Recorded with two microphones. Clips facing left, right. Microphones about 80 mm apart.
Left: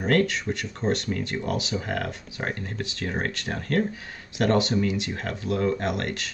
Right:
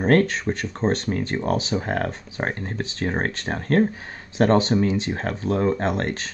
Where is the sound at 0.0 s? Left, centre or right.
Right.